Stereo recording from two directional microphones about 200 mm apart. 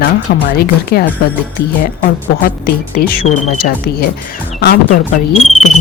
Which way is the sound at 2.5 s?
50° left (ahead or behind).